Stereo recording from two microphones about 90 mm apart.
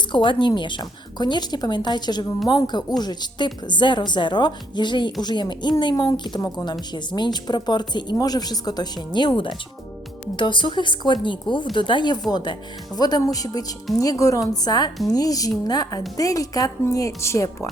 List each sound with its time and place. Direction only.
0.1 s a woman's voice: 65° left (ahead or behind)
9.1 s a woman's voice: 60° left (ahead or behind); by 17.7 s 35° left (ahead or behind)